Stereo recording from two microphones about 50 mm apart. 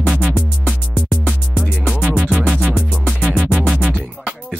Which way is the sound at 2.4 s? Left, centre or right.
Centre.